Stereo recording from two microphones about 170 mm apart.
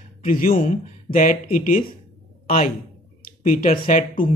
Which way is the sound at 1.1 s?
50° left (ahead or behind).